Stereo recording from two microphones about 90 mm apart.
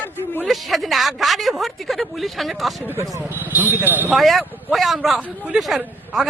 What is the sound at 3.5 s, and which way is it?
Speech, 20° right (ahead or behind).